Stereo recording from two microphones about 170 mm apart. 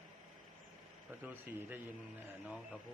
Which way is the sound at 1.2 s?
10° right (ahead or behind).